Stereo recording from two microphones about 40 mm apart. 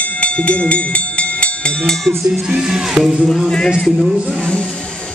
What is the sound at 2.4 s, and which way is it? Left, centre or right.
Speech, centre.